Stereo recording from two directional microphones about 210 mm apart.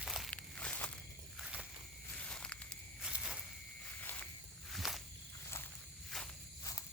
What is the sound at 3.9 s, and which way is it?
Walk, 10° left (ahead or behind).